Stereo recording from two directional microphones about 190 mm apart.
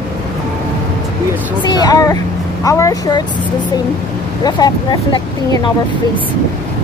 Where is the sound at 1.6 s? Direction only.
20° left (ahead or behind).